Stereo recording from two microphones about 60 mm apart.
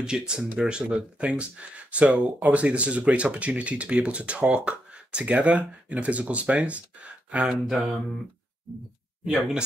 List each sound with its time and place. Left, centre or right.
0.0 s speech: centre
7.6 s mantra: centre